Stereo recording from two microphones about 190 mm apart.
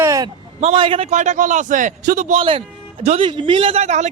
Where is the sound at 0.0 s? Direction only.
15° right (ahead or behind).